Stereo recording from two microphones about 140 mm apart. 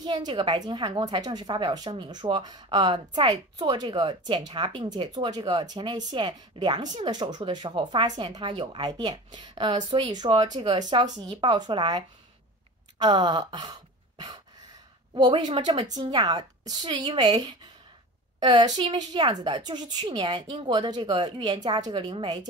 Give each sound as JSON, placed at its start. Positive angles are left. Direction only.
{"t": 0.0, "sound": "a woman's voice", "side_deg": -35}
{"t": 13.0, "sound": "a woman's voice", "side_deg": -30}
{"t": 15.9, "sound": "a woman's voice", "side_deg": -30}